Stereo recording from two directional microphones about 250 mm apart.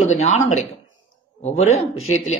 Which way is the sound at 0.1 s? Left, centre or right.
Left.